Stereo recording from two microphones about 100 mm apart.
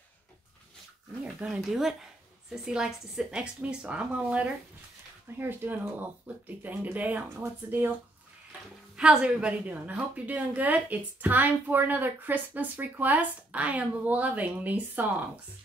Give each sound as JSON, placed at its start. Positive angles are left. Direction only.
{"t": 1.2, "sound": "speech", "side_deg": -5}
{"t": 8.9, "sound": "speech", "side_deg": -10}